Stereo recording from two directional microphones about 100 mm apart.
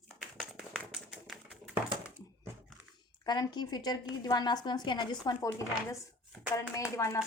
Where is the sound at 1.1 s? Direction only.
Centre (ahead or behind).